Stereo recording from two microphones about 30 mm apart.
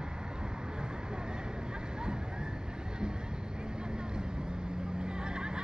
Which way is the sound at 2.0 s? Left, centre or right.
Right.